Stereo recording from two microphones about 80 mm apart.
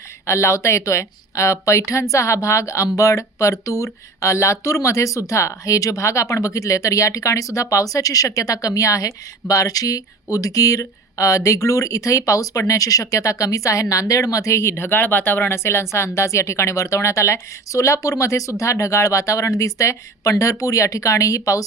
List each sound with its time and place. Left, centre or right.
0.3 s speech: left